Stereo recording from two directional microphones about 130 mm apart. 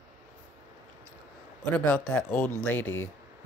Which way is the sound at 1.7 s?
10° left (ahead or behind).